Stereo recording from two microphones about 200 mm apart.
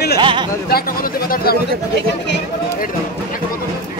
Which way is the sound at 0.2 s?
25° right (ahead or behind).